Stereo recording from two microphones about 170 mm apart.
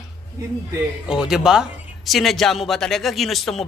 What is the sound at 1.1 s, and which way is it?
Speech, 5° right (ahead or behind).